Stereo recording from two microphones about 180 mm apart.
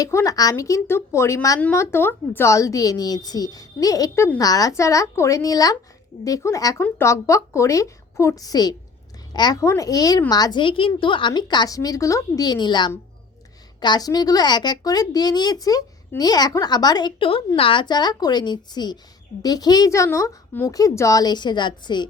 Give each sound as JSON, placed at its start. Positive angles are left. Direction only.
{"t": 0.0, "sound": "a woman's voice", "side_deg": 15}